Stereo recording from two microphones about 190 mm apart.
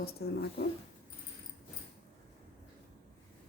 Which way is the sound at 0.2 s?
60° left (ahead or behind).